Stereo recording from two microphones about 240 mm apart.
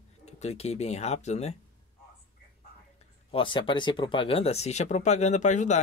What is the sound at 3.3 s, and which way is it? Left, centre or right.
Speech, centre.